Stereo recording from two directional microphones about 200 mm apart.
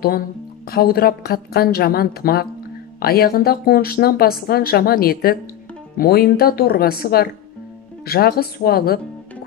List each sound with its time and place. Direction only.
0.7 s speech: 50° left (ahead or behind)